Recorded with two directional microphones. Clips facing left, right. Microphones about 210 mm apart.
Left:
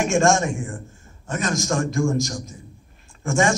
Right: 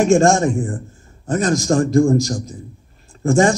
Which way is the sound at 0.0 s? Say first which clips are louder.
Right 6 dB; 35° right (ahead or behind).